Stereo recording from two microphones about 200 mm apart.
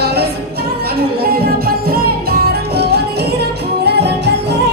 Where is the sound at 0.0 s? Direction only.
55° right (ahead or behind).